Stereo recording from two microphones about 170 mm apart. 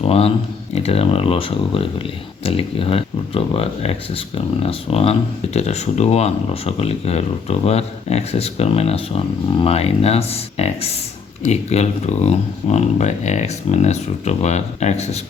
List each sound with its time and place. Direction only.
0.0 s speech: 35° left (ahead or behind)